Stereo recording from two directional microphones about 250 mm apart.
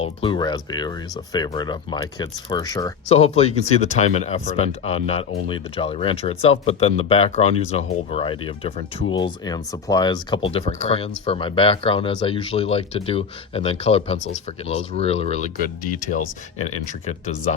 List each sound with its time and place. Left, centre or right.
0.0 s speech: centre